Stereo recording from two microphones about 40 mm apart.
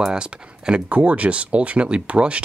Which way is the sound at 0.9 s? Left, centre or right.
Right.